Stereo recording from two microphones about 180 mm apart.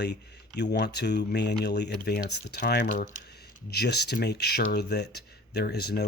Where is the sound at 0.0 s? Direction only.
70° left (ahead or behind).